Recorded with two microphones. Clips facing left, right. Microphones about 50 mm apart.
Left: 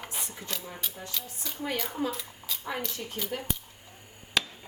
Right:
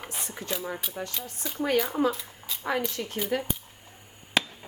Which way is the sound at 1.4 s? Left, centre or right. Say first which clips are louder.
Right 4 dB; centre.